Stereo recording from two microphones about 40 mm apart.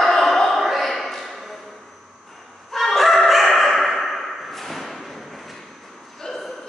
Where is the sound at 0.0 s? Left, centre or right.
Centre.